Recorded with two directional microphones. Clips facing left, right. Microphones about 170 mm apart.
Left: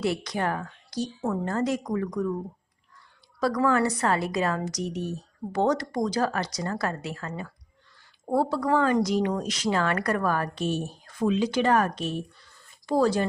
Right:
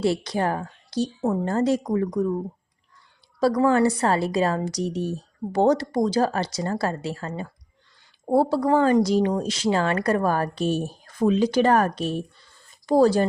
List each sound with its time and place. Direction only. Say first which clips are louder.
0.0 s a woman's voice: right 4 dB; 30° right (ahead or behind)
3.4 s a woman's voice: right 4 dB; 30° right (ahead or behind)